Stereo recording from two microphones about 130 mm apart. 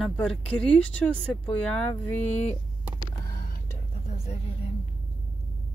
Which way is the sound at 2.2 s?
60° left (ahead or behind).